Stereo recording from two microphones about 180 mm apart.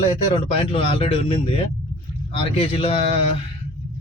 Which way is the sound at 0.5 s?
30° left (ahead or behind).